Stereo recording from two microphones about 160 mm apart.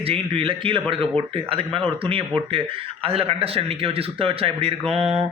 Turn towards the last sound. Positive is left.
turn(degrees=-40)  # may be behind; listen again after turning